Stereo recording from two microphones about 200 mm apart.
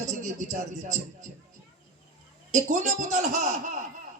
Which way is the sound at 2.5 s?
35° right (ahead or behind).